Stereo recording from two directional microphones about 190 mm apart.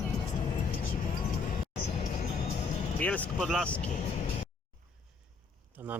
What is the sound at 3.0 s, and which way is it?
Speech, 10° left (ahead or behind).